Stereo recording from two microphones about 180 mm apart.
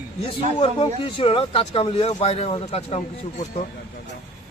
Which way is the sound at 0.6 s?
30° left (ahead or behind).